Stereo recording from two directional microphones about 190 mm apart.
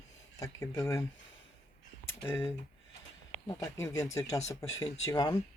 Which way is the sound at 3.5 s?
15° left (ahead or behind).